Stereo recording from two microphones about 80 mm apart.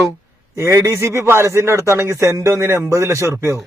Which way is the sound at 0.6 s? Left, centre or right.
Right.